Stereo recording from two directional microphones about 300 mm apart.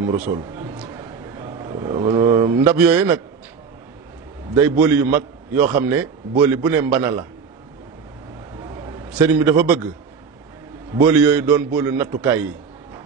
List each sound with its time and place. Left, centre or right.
0.1 s a man's voice: centre
4.6 s a man's voice: centre
9.2 s a man's voice: centre
11.0 s a man's voice: centre